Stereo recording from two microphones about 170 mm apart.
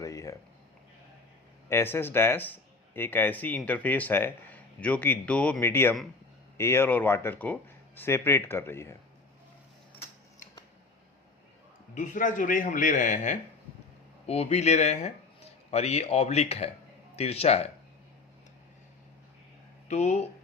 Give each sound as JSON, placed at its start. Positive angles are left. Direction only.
{"t": 0.0, "sound": "speech", "side_deg": 20}
{"t": 1.7, "sound": "speech", "side_deg": 15}
{"t": 11.9, "sound": "a man's voice", "side_deg": 50}
{"t": 19.9, "sound": "speech", "side_deg": 40}